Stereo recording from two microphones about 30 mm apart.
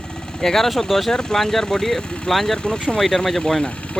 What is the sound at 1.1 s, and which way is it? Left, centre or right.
Speech, centre.